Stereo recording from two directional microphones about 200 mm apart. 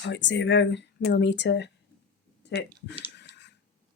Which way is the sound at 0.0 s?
60° left (ahead or behind).